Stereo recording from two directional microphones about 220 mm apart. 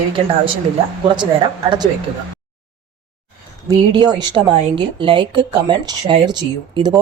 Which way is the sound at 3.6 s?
20° right (ahead or behind).